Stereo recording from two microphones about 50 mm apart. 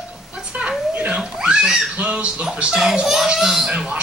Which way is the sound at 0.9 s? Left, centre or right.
Right.